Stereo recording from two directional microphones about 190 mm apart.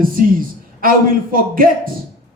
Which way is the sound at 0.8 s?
50° right (ahead or behind).